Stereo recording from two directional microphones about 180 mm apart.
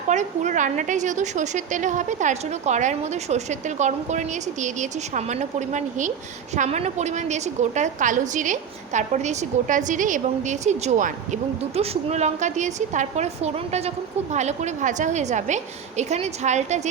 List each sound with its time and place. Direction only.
0.1 s a woman's voice: 40° right (ahead or behind)